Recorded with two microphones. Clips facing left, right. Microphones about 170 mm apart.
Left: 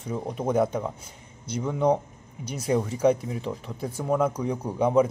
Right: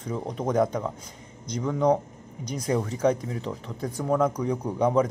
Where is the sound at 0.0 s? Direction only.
10° left (ahead or behind).